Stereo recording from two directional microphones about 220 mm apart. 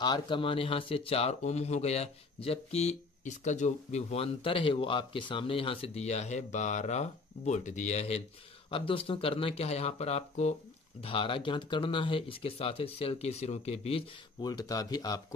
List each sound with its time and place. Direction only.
0.0 s speech: 20° left (ahead or behind)